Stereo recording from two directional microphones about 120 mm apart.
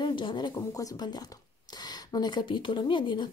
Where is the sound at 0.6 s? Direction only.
30° left (ahead or behind).